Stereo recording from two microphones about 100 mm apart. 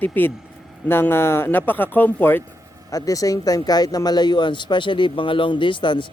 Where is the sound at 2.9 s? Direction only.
35° left (ahead or behind); by 6.0 s 55° left (ahead or behind).